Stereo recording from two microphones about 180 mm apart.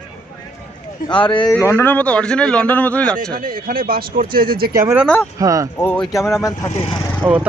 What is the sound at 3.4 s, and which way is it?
Speech, 50° right (ahead or behind).